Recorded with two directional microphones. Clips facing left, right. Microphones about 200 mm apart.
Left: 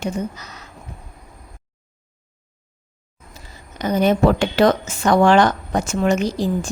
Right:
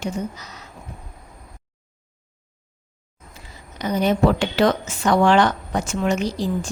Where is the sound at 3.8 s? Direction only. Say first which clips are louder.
Left 2 dB; 50° left (ahead or behind).